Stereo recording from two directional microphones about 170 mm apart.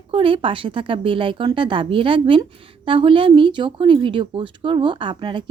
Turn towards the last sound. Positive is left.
turn(degrees=-30)  # may be behind; listen again after turning